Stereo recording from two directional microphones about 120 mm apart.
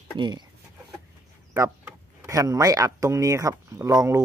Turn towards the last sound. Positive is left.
turn(degrees=-25)  # may be behind; listen again after turning